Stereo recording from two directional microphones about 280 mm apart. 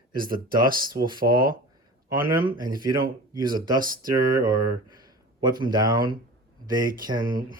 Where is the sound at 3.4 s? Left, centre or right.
Centre.